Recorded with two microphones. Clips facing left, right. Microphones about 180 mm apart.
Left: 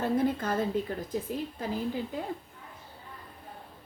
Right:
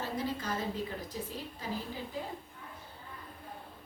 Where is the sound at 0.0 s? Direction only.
55° left (ahead or behind).